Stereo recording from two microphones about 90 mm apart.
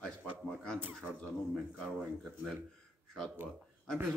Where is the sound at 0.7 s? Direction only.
20° right (ahead or behind).